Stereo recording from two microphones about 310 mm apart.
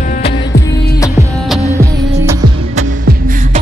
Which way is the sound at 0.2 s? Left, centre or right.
Left.